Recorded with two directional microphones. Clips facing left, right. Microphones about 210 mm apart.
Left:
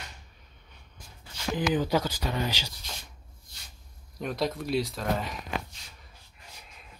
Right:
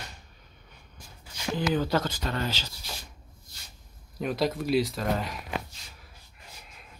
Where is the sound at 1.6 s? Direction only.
15° left (ahead or behind).